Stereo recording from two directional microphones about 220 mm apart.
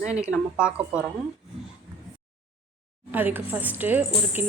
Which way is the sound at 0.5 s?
5° right (ahead or behind).